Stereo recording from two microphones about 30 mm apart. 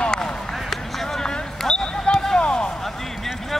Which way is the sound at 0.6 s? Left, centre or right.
Centre.